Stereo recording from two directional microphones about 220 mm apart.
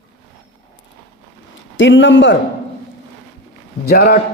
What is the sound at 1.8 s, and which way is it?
Speech, 55° left (ahead or behind).